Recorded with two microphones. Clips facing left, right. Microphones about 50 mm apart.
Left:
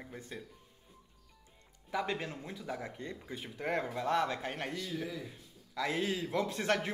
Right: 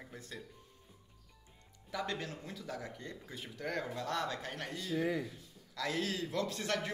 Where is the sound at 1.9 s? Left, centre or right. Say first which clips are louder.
Left 3 dB; centre.